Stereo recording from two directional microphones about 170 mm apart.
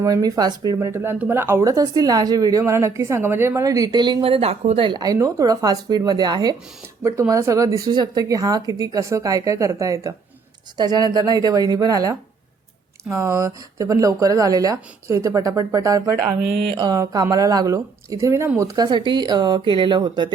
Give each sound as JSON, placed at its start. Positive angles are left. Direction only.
{"t": 0.0, "sound": "speech", "side_deg": -20}
{"t": 4.9, "sound": "speech", "side_deg": -25}